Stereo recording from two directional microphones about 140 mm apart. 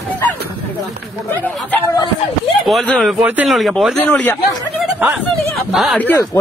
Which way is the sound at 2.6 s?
Centre (ahead or behind).